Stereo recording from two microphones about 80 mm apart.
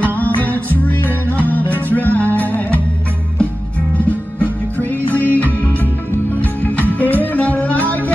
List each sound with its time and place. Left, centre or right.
0.0 s music: left
4.0 s music: centre